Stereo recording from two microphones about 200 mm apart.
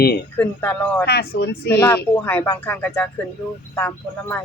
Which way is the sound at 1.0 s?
50° left (ahead or behind).